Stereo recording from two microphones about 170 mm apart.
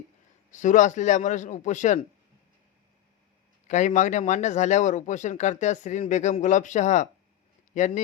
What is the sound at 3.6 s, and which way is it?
Speech, 45° left (ahead or behind).